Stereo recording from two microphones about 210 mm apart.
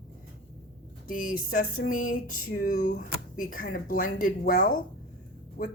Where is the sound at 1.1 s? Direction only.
40° left (ahead or behind).